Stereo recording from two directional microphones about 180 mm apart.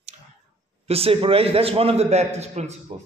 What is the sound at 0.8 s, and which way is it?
A man's voice, 35° right (ahead or behind).